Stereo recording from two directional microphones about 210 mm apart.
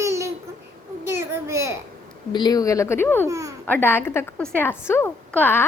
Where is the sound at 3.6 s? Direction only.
10° left (ahead or behind).